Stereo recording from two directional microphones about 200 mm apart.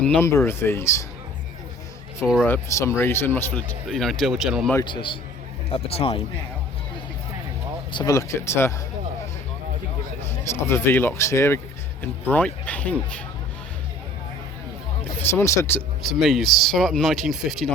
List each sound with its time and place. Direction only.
0.0 s speech: 10° left (ahead or behind)
2.2 s speech: 5° right (ahead or behind)
2.5 s speech: 15° left (ahead or behind)
3.8 s speech: centre (ahead or behind)
4.7 s a man's voice: 20° left (ahead or behind)
7.9 s speech: 15° left (ahead or behind)
10.2 s speech: 15° left (ahead or behind)
15.2 s speech: 10° left (ahead or behind)
16.1 s speech: centre (ahead or behind)